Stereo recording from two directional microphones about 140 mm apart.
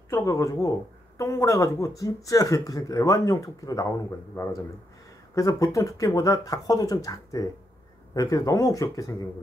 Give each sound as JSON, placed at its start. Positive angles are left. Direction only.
{"t": 0.1, "sound": "speech", "side_deg": 25}